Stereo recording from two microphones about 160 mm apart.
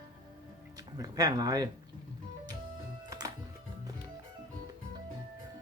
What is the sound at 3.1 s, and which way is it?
Music, 20° right (ahead or behind).